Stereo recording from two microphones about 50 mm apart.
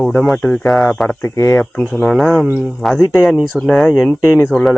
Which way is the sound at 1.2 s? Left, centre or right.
Left.